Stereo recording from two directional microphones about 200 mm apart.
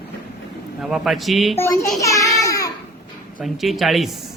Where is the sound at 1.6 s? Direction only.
15° left (ahead or behind).